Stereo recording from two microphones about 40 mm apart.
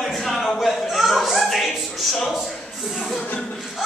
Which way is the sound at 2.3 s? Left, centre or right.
Centre.